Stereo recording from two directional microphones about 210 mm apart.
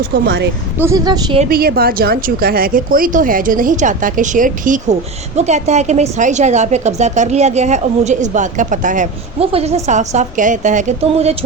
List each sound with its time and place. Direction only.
0.1 s speech: 50° right (ahead or behind)
0.9 s speech: 15° right (ahead or behind)
1.5 s a woman's voice: 45° right (ahead or behind); by 11.3 s 30° right (ahead or behind)